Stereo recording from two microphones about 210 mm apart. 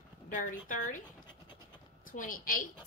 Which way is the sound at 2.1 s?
40° left (ahead or behind).